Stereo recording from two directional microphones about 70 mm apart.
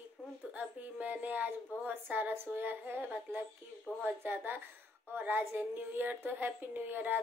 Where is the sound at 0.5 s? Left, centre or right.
Right.